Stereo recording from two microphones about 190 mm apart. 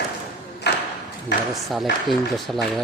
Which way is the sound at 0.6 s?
60° left (ahead or behind).